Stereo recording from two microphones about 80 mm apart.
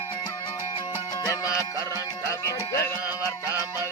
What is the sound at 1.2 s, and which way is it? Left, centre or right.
Music, left.